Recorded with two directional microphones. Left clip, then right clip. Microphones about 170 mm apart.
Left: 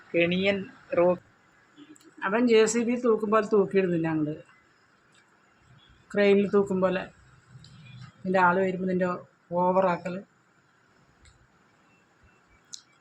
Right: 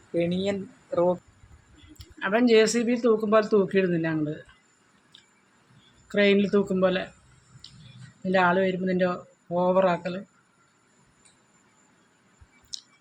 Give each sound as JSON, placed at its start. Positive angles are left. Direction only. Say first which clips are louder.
{"t": 0.1, "sound": "speech", "louder": "left 2 dB", "side_deg": -15}
{"t": 2.1, "sound": "speech", "louder": "right 2 dB", "side_deg": -20}
{"t": 6.1, "sound": "speech", "louder": "even", "side_deg": -20}
{"t": 8.2, "sound": "speech", "louder": "right 1 dB", "side_deg": -20}